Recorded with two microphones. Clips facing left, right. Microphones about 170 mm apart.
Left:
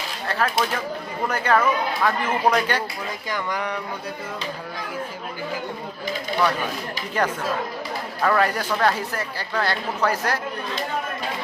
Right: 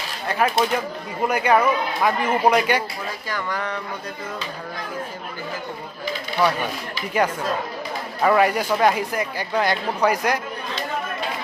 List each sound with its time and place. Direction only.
0.3 s speech: 15° right (ahead or behind)
3.2 s speech: 15° left (ahead or behind)
8.2 s speech: 10° right (ahead or behind)